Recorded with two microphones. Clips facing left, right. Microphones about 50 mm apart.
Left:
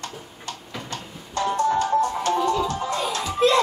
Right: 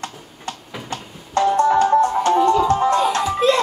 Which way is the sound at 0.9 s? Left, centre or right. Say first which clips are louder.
Right 9 dB; right.